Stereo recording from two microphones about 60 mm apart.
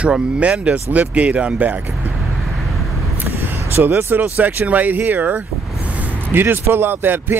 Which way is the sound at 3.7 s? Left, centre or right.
Right.